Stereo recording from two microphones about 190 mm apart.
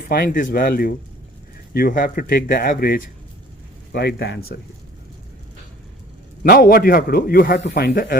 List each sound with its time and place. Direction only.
0.1 s a man's voice: 45° left (ahead or behind)
6.4 s a man's voice: 50° left (ahead or behind)